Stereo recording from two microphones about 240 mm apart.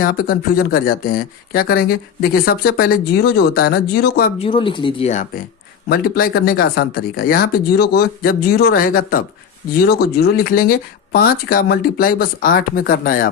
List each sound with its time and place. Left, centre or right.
0.0 s speech: left
4.4 s speech: left